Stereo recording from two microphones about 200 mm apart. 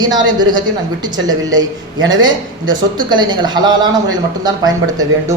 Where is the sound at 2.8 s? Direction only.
20° right (ahead or behind).